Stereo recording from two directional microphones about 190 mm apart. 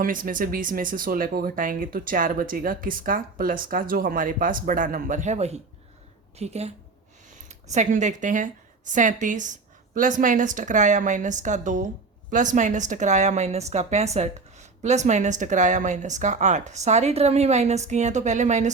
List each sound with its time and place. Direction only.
0.0 s a woman's voice: 45° right (ahead or behind)